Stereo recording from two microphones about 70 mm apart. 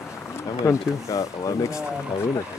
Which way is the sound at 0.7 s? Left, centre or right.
Left.